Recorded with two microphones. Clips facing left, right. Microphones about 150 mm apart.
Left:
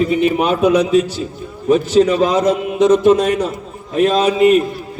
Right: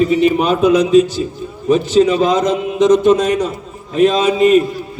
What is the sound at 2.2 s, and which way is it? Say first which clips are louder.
Speech: even; 10° left (ahead or behind).